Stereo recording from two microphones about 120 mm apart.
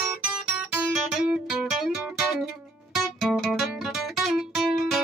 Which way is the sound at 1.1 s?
5° right (ahead or behind).